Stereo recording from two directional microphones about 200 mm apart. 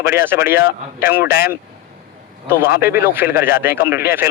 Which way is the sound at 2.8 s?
10° right (ahead or behind).